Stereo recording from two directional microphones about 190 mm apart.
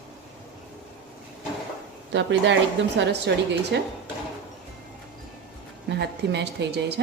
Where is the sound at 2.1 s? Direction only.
70° right (ahead or behind).